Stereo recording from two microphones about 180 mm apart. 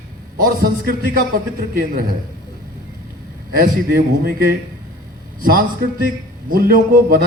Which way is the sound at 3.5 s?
50° right (ahead or behind).